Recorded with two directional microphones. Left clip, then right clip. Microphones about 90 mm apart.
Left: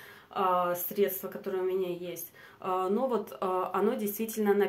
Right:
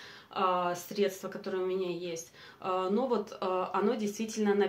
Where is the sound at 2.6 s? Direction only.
35° left (ahead or behind).